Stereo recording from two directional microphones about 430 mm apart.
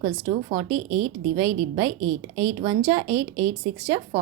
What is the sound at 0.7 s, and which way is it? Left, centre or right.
Speech, right.